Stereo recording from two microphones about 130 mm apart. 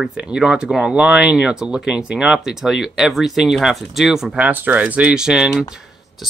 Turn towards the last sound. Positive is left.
turn(degrees=-5)  # may be behind; listen again after turning